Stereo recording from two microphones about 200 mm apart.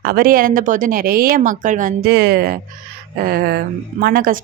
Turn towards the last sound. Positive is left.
turn(degrees=-45)  # may be behind; listen again after turning